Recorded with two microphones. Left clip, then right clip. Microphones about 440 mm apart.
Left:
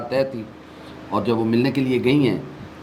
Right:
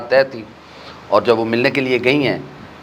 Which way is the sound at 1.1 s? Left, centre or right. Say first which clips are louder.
Right 7 dB; right.